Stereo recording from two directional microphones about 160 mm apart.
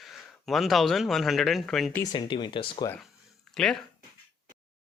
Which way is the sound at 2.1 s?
30° left (ahead or behind).